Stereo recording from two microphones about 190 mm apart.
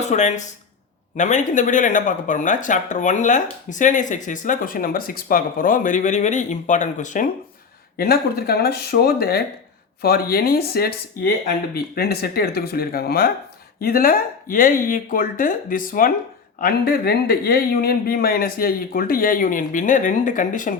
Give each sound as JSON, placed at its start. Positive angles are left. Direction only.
{"t": 0.0, "sound": "speech", "side_deg": 40}
{"t": 7.9, "sound": "speech", "side_deg": 55}